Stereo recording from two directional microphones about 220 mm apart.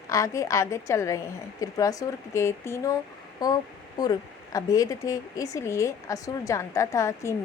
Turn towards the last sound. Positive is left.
turn(degrees=15)  # may be behind; listen again after turning